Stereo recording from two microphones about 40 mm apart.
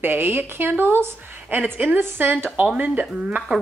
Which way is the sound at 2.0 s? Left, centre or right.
Right.